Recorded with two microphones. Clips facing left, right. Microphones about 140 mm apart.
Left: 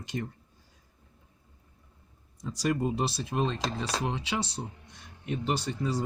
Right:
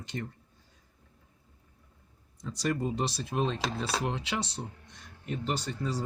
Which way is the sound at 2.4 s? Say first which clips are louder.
Left 2 dB; 10° left (ahead or behind).